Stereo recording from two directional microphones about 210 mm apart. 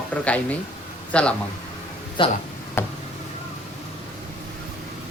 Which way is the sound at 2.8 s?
10° left (ahead or behind).